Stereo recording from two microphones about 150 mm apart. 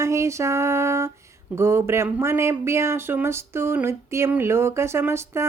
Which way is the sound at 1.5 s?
15° right (ahead or behind).